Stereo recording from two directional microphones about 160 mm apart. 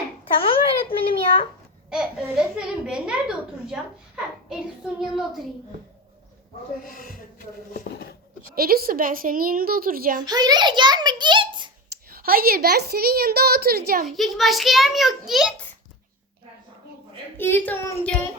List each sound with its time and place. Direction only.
0.4 s a sound: 35° left (ahead or behind)
1.9 s a child's voice: 5° right (ahead or behind)
6.8 s speech: 60° left (ahead or behind)
8.5 s a woman's voice: 70° right (ahead or behind)
10.2 s a child's voice: 25° right (ahead or behind)
12.1 s a woman's voice: 70° right (ahead or behind)
14.2 s a child's voice: centre (ahead or behind)
17.3 s a child's voice: 15° left (ahead or behind)